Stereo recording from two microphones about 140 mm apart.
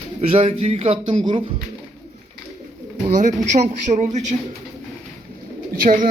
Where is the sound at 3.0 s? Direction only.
55° right (ahead or behind).